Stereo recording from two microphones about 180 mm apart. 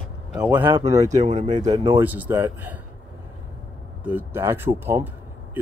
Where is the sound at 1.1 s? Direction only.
40° right (ahead or behind).